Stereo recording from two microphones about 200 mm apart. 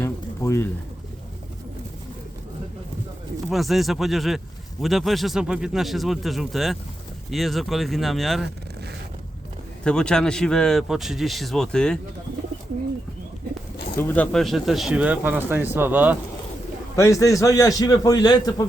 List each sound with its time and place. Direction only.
0.0 s pigeon: 15° left (ahead or behind)
3.5 s a man's voice: centre (ahead or behind)
9.8 s a man's voice: 5° left (ahead or behind)
14.0 s a man's voice: 5° left (ahead or behind)
17.0 s a man's voice: 15° left (ahead or behind)